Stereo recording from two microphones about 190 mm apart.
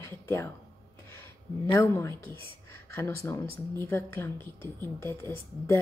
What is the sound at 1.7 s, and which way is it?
A woman's voice, 15° left (ahead or behind).